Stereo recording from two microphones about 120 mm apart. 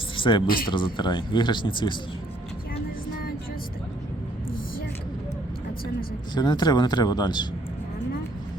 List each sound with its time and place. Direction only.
0.2 s a man's voice: 40° left (ahead or behind)
6.3 s a man's voice: 35° left (ahead or behind)